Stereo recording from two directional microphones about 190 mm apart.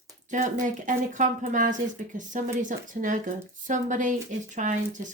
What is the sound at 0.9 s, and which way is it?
A woman's voice, 40° right (ahead or behind).